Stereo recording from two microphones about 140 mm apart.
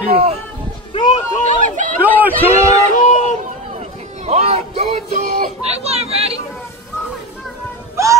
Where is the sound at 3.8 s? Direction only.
50° right (ahead or behind).